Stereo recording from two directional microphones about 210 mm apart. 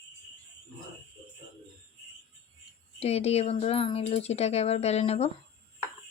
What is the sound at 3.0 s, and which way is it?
Speech, 30° left (ahead or behind).